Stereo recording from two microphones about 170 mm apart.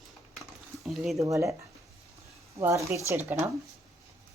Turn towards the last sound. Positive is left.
turn(degrees=-10)  # may be behind; listen again after turning